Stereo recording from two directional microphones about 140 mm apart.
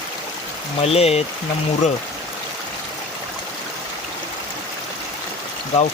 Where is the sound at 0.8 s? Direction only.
45° left (ahead or behind).